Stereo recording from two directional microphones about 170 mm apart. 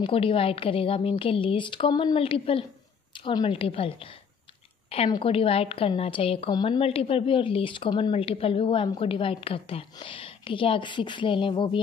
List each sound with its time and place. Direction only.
0.0 s a woman's voice: 30° left (ahead or behind)
4.8 s a sound: 35° left (ahead or behind)
5.1 s a woman's voice: 35° left (ahead or behind)